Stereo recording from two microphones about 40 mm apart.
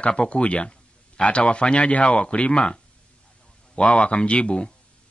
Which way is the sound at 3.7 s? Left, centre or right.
Left.